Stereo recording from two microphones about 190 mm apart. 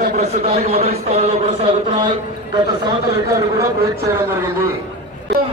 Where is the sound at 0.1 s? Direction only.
35° right (ahead or behind); by 4.6 s 15° right (ahead or behind).